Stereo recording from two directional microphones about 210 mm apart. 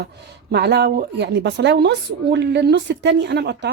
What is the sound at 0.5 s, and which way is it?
A woman's voice, 50° right (ahead or behind).